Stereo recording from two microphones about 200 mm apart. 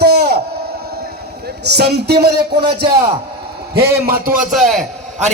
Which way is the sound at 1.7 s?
55° right (ahead or behind).